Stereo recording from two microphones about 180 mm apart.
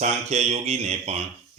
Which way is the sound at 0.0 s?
40° right (ahead or behind).